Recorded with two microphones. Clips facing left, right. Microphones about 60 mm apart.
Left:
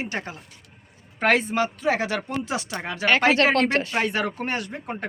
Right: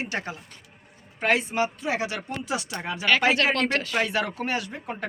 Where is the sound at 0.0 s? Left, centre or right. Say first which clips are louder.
Left 1 dB; left.